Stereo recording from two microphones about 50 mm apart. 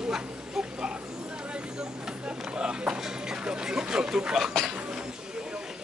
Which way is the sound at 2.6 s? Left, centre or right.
Centre.